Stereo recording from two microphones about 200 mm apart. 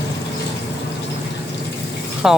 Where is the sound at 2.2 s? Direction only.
5° right (ahead or behind).